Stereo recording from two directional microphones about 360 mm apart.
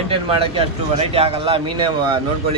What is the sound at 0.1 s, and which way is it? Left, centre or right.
A man's voice, centre.